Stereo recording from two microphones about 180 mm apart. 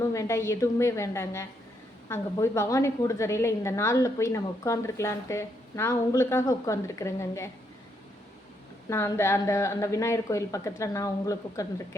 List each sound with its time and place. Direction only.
0.0 s a woman's voice: 15° left (ahead or behind)
8.9 s a woman's voice: 15° left (ahead or behind)